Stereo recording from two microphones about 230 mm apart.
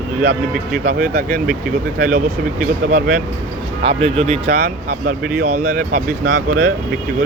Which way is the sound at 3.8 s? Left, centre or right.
Right.